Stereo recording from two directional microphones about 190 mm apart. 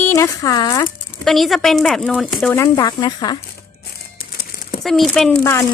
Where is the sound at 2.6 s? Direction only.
20° left (ahead or behind).